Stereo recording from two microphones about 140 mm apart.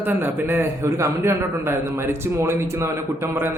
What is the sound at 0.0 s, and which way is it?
A man's voice, 15° right (ahead or behind).